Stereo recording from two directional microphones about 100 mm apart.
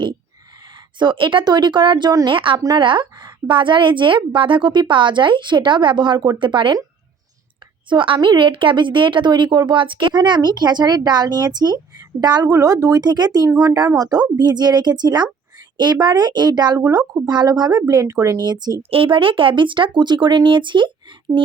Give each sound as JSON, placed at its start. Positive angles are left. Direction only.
{"t": 0.9, "sound": "a woman's voice", "side_deg": -55}
{"t": 7.9, "sound": "a woman's voice", "side_deg": -55}
{"t": 18.8, "sound": "a woman's voice", "side_deg": -65}